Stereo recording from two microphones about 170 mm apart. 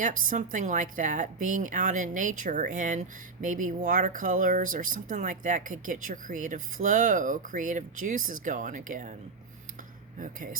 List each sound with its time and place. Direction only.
0.0 s a woman's voice: 50° right (ahead or behind)